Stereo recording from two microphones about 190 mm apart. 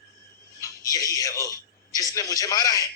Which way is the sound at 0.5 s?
15° left (ahead or behind).